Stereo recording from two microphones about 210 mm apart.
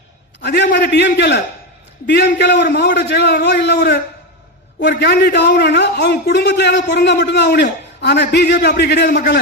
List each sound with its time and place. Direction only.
0.4 s a man's voice: 55° left (ahead or behind)